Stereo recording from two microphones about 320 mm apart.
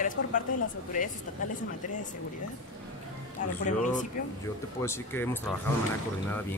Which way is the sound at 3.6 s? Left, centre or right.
Left.